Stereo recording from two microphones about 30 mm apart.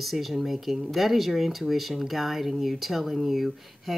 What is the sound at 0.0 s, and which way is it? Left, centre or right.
Speech, centre.